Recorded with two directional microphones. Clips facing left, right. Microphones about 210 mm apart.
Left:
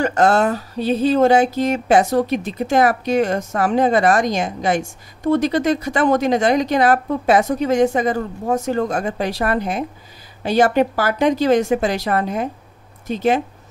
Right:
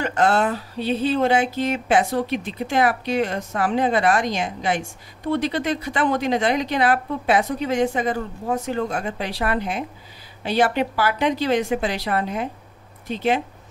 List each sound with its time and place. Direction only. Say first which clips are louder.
0.0 s speech: left 4 dB; 45° left (ahead or behind)